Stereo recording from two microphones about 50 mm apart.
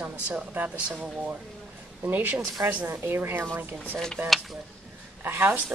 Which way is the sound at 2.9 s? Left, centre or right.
Right.